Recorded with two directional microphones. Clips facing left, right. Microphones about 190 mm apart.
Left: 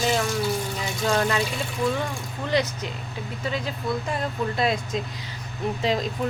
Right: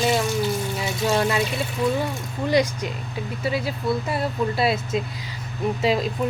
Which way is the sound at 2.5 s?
10° right (ahead or behind).